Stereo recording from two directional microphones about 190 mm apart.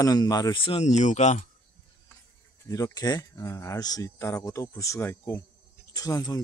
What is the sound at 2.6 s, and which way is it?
A man's voice, 20° left (ahead or behind).